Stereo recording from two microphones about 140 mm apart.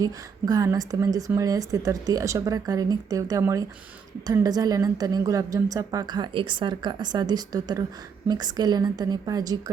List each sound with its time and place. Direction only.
0.0 s a woman's voice: 25° right (ahead or behind)